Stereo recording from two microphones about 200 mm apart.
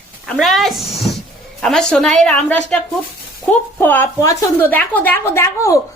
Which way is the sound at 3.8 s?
10° left (ahead or behind).